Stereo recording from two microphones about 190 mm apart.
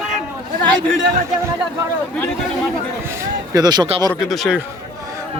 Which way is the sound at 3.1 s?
20° right (ahead or behind).